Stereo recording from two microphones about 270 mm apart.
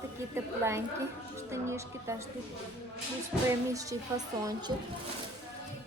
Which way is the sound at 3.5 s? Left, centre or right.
Centre.